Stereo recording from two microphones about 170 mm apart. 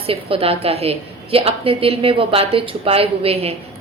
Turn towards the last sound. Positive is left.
turn(degrees=-35)  # may be behind; listen again after turning